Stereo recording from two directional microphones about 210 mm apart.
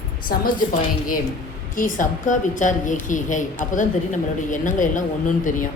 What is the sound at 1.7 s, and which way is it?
A woman's voice, 40° left (ahead or behind).